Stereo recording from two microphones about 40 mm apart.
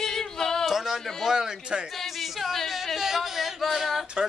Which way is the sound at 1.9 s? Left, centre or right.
Centre.